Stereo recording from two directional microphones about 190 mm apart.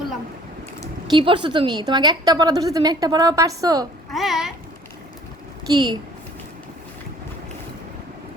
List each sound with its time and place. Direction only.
1.1 s a woman's voice: 25° right (ahead or behind)
4.1 s a sound: centre (ahead or behind)
5.7 s a woman's voice: 25° right (ahead or behind)